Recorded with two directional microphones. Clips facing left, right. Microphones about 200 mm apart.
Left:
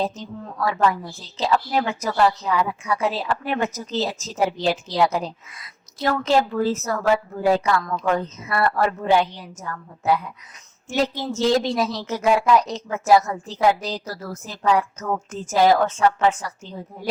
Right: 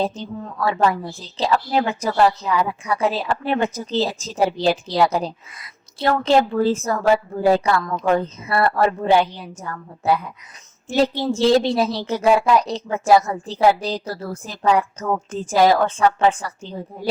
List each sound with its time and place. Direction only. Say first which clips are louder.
0.0 s a woman's voice: right 3 dB; 30° right (ahead or behind)
6.0 s a woman's voice: right 3 dB; 30° right (ahead or behind)